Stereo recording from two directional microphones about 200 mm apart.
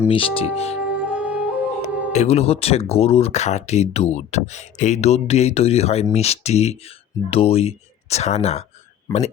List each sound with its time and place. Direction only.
0.1 s speech: 25° left (ahead or behind)
0.9 s music: 5° right (ahead or behind)
2.1 s speech: 35° left (ahead or behind)